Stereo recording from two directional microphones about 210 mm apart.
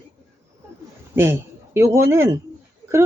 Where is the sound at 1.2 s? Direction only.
10° right (ahead or behind).